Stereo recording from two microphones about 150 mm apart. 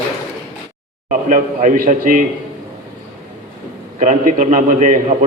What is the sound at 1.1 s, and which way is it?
A man's voice, 60° right (ahead or behind).